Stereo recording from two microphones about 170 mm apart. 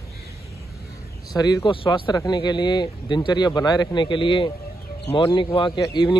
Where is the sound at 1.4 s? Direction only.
20° left (ahead or behind).